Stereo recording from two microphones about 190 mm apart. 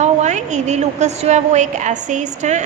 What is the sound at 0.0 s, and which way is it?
A woman's voice, 40° right (ahead or behind).